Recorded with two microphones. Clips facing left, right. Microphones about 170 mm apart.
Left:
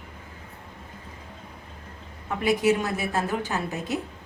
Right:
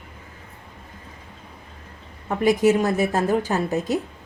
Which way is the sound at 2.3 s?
45° right (ahead or behind).